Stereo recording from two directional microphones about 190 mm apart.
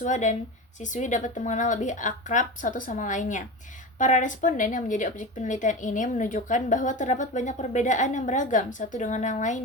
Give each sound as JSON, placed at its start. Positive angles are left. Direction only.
{"t": 0.0, "sound": "speech", "side_deg": 40}